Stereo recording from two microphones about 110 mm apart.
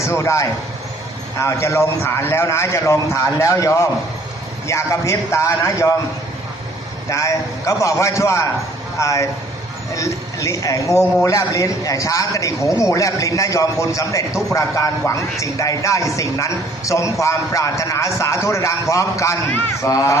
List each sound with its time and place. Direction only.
0.0 s a man's voice: 25° left (ahead or behind)
7.1 s a man's voice: 30° left (ahead or behind)